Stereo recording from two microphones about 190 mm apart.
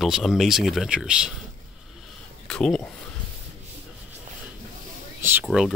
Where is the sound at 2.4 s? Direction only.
5° left (ahead or behind).